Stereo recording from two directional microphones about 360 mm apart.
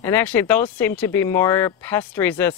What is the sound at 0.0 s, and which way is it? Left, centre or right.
Speech, centre.